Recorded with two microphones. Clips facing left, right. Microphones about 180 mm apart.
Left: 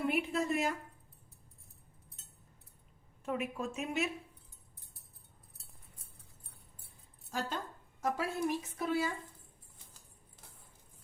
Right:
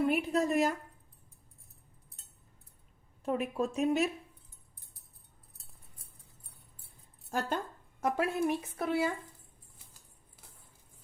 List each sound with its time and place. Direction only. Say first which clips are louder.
0.1 s speech: right 4 dB; 40° right (ahead or behind)
3.2 s speech: right 5 dB; 35° right (ahead or behind)
6.8 s keys jangling: right 1 dB; 50° right (ahead or behind)
8.0 s speech: right 4 dB; 60° right (ahead or behind)